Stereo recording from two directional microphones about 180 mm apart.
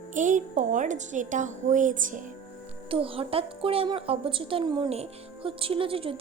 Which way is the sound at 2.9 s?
30° right (ahead or behind).